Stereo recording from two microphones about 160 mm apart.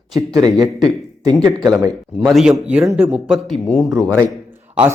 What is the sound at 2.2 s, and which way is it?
A man's voice, centre (ahead or behind).